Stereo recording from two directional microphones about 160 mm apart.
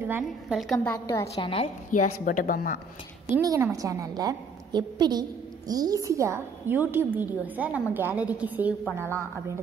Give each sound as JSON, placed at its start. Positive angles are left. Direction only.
{"t": 0.0, "sound": "a woman's voice", "side_deg": -10}
{"t": 0.7, "sound": "a woman's voice", "side_deg": 15}
{"t": 1.3, "sound": "a woman's voice", "side_deg": 35}
{"t": 2.2, "sound": "speech", "side_deg": 60}
{"t": 3.3, "sound": "a woman's voice", "side_deg": -15}